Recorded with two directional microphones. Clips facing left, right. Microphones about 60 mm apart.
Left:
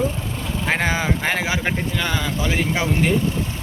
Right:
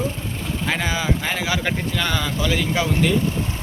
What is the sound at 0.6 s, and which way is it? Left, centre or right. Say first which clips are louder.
Speech: left 2 dB; left.